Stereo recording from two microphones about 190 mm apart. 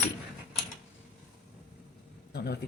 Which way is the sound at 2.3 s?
55° left (ahead or behind).